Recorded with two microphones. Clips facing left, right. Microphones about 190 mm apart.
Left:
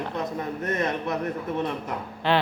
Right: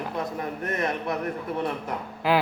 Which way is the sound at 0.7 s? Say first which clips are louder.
Left 1 dB; 25° left (ahead or behind).